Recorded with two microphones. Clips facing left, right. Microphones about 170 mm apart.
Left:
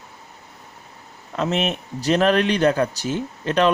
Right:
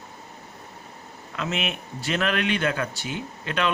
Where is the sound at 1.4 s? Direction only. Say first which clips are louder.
Left 7 dB; 40° left (ahead or behind).